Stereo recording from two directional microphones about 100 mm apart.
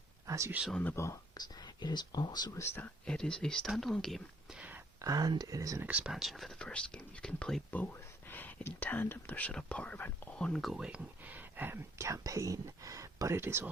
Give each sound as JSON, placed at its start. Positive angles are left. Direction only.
{"t": 0.3, "sound": "speech", "side_deg": -30}
{"t": 0.9, "sound": "speech", "side_deg": 30}
{"t": 1.4, "sound": "speech", "side_deg": 45}
{"t": 2.6, "sound": "speech", "side_deg": 25}
{"t": 3.1, "sound": "speech", "side_deg": 10}
{"t": 4.5, "sound": "a sound", "side_deg": -15}
{"t": 5.0, "sound": "speech", "side_deg": -40}
{"t": 5.8, "sound": "speech", "side_deg": -15}
{"t": 8.3, "sound": "speech", "side_deg": 20}
{"t": 10.8, "sound": "speech", "side_deg": -10}